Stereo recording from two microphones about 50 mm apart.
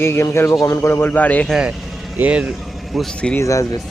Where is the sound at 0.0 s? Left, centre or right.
Left.